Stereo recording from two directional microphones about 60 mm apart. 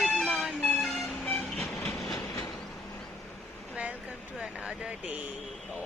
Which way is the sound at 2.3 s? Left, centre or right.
Left.